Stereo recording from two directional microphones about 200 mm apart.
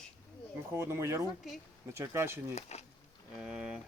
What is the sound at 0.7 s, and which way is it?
Speech, 10° right (ahead or behind).